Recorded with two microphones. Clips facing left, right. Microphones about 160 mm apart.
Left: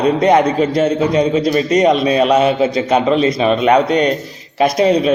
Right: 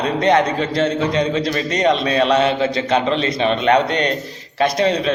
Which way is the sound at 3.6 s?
10° left (ahead or behind).